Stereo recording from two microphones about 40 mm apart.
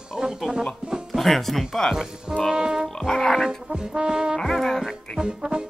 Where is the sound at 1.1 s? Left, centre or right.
Centre.